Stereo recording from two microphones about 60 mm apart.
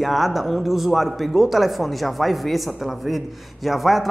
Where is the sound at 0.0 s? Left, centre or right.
Centre.